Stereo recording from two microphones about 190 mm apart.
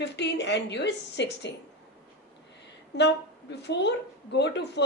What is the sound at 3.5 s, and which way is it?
Speech, 65° left (ahead or behind).